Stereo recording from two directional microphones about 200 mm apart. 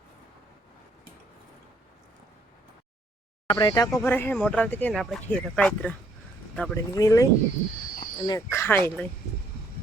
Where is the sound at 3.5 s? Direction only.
20° left (ahead or behind).